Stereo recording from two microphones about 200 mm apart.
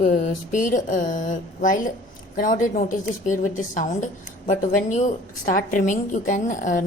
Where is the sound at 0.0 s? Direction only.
40° left (ahead or behind).